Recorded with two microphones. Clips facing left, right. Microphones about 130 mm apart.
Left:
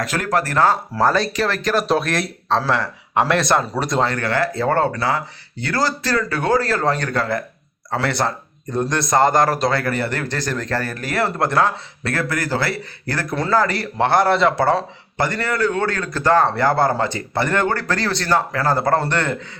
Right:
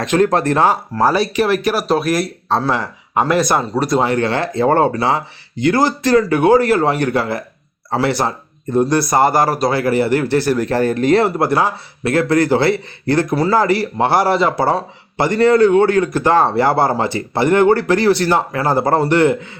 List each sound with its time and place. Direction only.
0.0 s a man's voice: 20° right (ahead or behind); by 4.0 s centre (ahead or behind)
4.0 s a man's voice: 20° right (ahead or behind)
11.3 s a man's voice: 10° right (ahead or behind)